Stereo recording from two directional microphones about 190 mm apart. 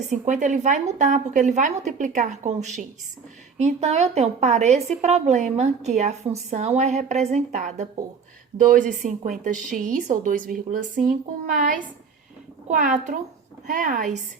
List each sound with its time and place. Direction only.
0.1 s a woman's voice: 40° right (ahead or behind)